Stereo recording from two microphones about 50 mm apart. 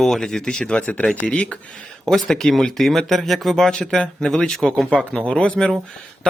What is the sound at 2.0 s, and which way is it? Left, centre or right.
A man's voice, centre.